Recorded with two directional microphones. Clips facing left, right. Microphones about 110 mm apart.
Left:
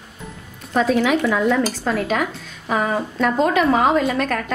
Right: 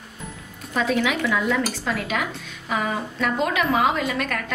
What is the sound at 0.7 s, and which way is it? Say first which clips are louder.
Speech: left 5 dB; 40° left (ahead or behind).